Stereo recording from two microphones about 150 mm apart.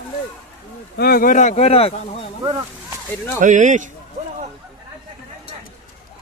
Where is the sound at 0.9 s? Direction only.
85° left; by 2.0 s 40° left (ahead or behind).